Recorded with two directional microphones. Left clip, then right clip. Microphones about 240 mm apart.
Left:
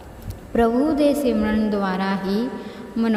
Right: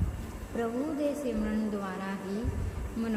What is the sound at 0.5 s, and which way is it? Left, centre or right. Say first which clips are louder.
A woman's voice: left 14 dB; left.